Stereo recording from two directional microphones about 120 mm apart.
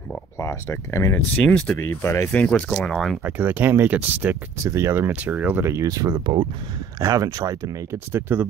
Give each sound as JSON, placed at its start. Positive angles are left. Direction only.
{"t": 0.4, "sound": "speech", "side_deg": 20}
{"t": 3.3, "sound": "speech", "side_deg": -15}
{"t": 7.0, "sound": "speech", "side_deg": -30}